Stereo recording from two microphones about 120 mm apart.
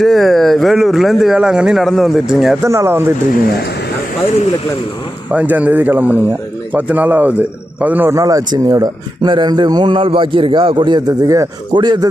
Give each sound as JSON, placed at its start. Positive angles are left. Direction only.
{"t": 0.0, "sound": "speech", "side_deg": 0}
{"t": 2.6, "sound": "speech", "side_deg": -25}
{"t": 5.3, "sound": "speech", "side_deg": -10}
{"t": 8.2, "sound": "speech", "side_deg": -30}